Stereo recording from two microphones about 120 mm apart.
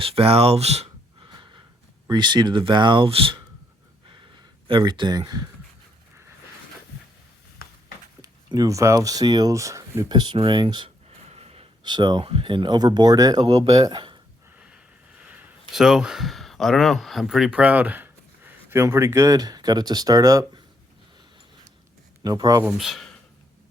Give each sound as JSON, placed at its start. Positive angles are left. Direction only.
{"t": 0.0, "sound": "speech", "side_deg": -50}
{"t": 1.3, "sound": "a sound", "side_deg": -40}
{"t": 2.0, "sound": "speech", "side_deg": -35}
{"t": 4.7, "sound": "speech", "side_deg": -45}
{"t": 8.2, "sound": "speech", "side_deg": -30}
{"t": 10.1, "sound": "speech", "side_deg": -40}
{"t": 11.3, "sound": "gasp", "side_deg": -60}
{"t": 11.8, "sound": "speech", "side_deg": -35}
{"t": 12.2, "sound": "speech", "side_deg": -50}
{"t": 15.2, "sound": "a sound", "side_deg": -10}
{"t": 15.7, "sound": "speech", "side_deg": -5}
{"t": 22.2, "sound": "speech", "side_deg": -30}
{"t": 22.8, "sound": "speech", "side_deg": 0}